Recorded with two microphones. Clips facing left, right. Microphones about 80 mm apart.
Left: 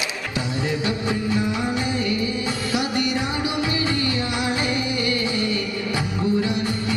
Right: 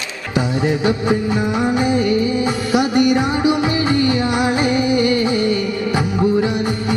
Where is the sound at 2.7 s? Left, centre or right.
Centre.